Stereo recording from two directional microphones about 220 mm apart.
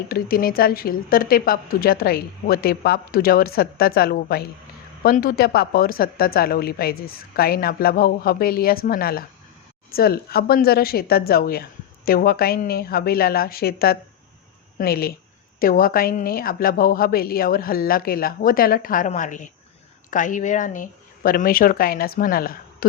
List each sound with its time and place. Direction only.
0.1 s a woman's voice: 40° left (ahead or behind)